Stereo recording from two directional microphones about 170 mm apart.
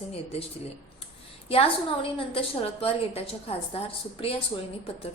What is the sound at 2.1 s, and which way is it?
A woman's voice, 35° left (ahead or behind).